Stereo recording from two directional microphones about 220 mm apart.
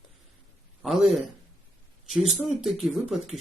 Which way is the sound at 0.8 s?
Centre (ahead or behind).